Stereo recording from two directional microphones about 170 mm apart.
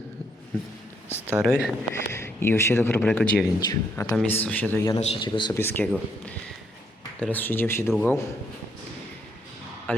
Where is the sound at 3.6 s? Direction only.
20° left (ahead or behind).